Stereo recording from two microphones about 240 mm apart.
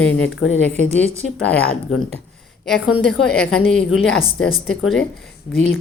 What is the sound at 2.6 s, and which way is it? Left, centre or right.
A woman's voice, centre.